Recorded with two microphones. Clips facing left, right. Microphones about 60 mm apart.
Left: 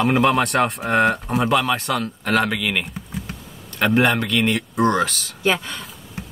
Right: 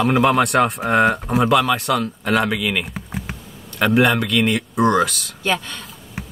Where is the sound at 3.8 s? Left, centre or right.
Centre.